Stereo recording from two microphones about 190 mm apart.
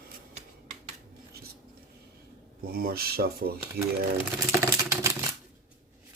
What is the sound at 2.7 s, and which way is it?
Speech, 50° right (ahead or behind).